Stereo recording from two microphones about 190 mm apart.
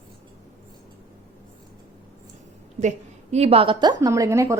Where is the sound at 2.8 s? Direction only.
35° right (ahead or behind); by 4.5 s 15° right (ahead or behind).